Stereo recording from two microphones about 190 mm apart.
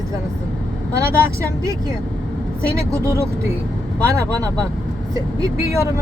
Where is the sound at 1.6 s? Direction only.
20° right (ahead or behind).